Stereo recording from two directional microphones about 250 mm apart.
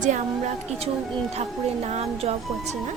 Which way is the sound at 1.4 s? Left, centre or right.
Right.